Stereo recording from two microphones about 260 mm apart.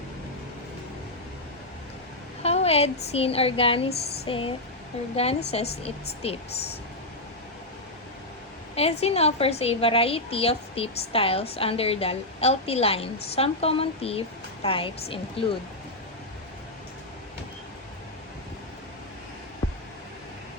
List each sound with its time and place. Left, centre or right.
2.4 s a woman's voice: left
8.7 s a woman's voice: left